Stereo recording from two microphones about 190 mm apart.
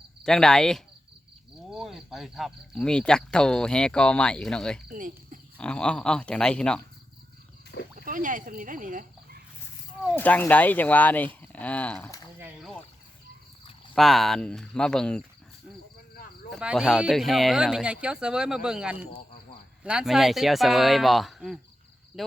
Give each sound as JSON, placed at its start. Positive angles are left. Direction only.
{"t": 0.3, "sound": "speech", "side_deg": 5}
{"t": 4.9, "sound": "speech", "side_deg": -45}
{"t": 5.5, "sound": "speech", "side_deg": 5}
{"t": 7.9, "sound": "speech", "side_deg": -45}
{"t": 10.2, "sound": "speech", "side_deg": 10}
{"t": 13.9, "sound": "speech", "side_deg": 0}
{"t": 16.5, "sound": "speech", "side_deg": 0}